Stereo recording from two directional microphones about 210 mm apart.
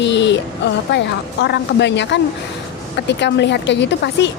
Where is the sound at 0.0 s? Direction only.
55° left (ahead or behind).